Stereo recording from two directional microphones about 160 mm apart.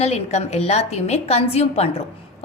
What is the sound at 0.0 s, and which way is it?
A woman's voice, 40° left (ahead or behind).